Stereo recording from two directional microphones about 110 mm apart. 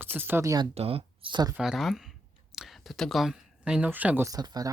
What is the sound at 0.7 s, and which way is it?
Speech, 65° right (ahead or behind).